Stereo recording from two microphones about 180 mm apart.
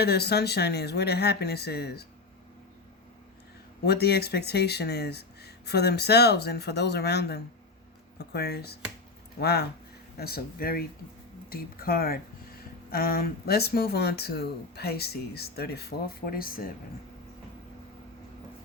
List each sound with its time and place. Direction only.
0.0 s speech: 65° left (ahead or behind)
3.8 s speech: 65° left (ahead or behind)